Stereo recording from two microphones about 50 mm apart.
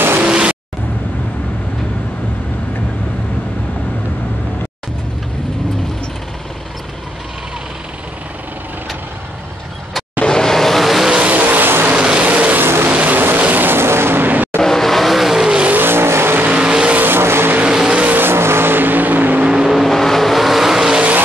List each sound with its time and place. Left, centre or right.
0.2 s vehicle: right
10.2 s vehicle: centre
11.1 s vehicle: right
11.4 s vehicle: right
11.9 s vehicle: right
14.6 s vehicle: centre
15.8 s vehicle: right
16.4 s vehicle: centre
17.0 s vehicle: right
17.6 s vehicle: centre
18.0 s vehicle: right
18.3 s vehicle: right
19.4 s vehicle: centre
19.8 s vehicle: centre